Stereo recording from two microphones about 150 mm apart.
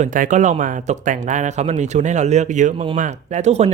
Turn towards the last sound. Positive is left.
turn(degrees=-45)  # may be behind; listen again after turning